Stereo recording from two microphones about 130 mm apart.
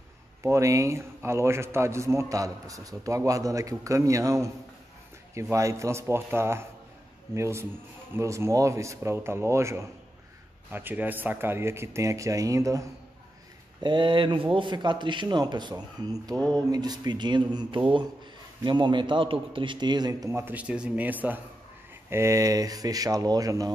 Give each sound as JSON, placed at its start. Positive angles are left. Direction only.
{"t": 0.4, "sound": "a man's voice", "side_deg": -25}
{"t": 13.8, "sound": "a man's voice", "side_deg": -40}